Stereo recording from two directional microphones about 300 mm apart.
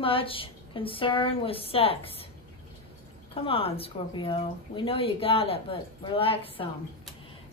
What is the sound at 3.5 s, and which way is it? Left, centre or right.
A woman's voice, centre.